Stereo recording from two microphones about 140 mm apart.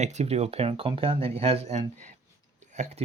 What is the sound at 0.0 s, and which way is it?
Speech, 55° right (ahead or behind).